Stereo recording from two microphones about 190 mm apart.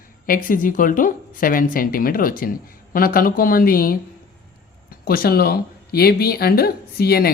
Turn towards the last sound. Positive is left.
turn(degrees=55)  # may be behind; listen again after turning